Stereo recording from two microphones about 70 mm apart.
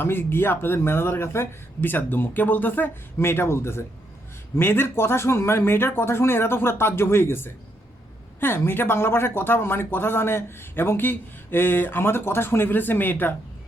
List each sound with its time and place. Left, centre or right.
0.0 s speech: left